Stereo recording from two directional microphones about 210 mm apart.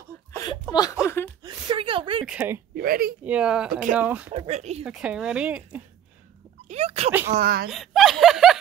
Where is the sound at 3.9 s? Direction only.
5° right (ahead or behind).